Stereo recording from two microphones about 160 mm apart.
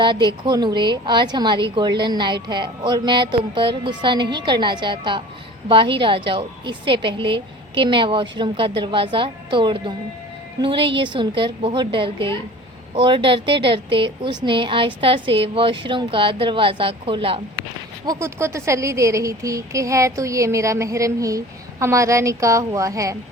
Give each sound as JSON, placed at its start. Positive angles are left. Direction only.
{"t": 0.0, "sound": "a woman's voice", "side_deg": -30}
{"t": 18.0, "sound": "a woman's voice", "side_deg": -20}